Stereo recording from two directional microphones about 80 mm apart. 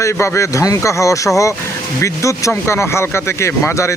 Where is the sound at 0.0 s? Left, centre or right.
Left.